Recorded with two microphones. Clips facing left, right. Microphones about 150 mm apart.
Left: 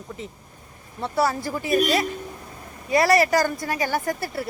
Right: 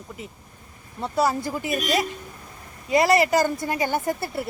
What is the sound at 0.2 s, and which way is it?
Speech, 5° right (ahead or behind).